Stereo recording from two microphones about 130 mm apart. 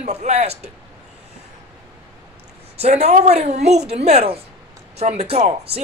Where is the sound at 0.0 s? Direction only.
55° right (ahead or behind).